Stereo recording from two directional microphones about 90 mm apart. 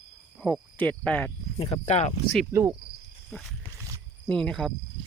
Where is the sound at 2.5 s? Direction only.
30° right (ahead or behind).